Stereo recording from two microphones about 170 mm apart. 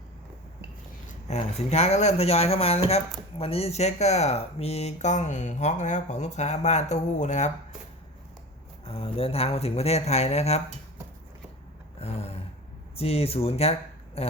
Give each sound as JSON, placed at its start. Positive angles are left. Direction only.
{"t": 1.3, "sound": "speech", "side_deg": 40}
{"t": 8.8, "sound": "speech", "side_deg": 35}
{"t": 11.9, "sound": "a sound", "side_deg": 35}
{"t": 13.0, "sound": "speech", "side_deg": 35}